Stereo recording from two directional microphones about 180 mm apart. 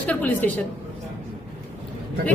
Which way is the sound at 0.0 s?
10° left (ahead or behind).